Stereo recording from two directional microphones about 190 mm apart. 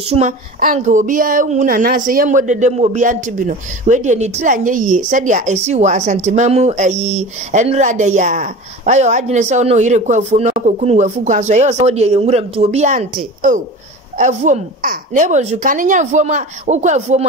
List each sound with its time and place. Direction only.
0.1 s a woman's voice: 40° right (ahead or behind)